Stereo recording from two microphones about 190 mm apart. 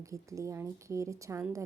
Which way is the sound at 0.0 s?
15° right (ahead or behind).